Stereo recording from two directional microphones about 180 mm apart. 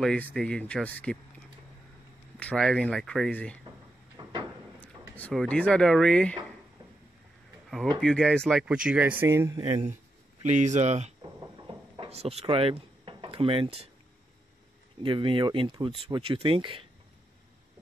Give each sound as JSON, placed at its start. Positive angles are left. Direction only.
{"t": 0.0, "sound": "speech", "side_deg": 5}
{"t": 2.3, "sound": "speech", "side_deg": 0}
{"t": 4.2, "sound": "a sound", "side_deg": -25}
{"t": 4.7, "sound": "speech", "side_deg": 10}
{"t": 8.0, "sound": "speech", "side_deg": 5}
{"t": 10.4, "sound": "speech", "side_deg": -40}
{"t": 11.5, "sound": "drawer open or close", "side_deg": -30}
{"t": 15.0, "sound": "speech", "side_deg": -25}